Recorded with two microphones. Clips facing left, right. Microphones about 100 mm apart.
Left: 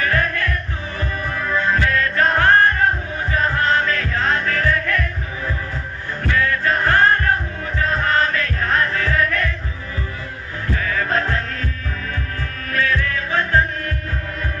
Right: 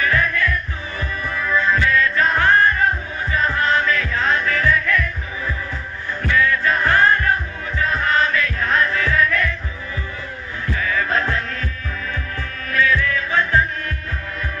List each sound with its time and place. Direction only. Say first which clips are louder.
0.0 s music: right 1 dB; 50° left (ahead or behind)
6.2 s music: right 1 dB; 45° left (ahead or behind)
10.7 s music: even; 45° left (ahead or behind)
12.7 s music: right 2 dB; 45° left (ahead or behind)